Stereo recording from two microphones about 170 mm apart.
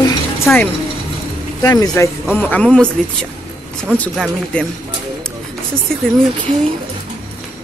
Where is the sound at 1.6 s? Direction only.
20° left (ahead or behind).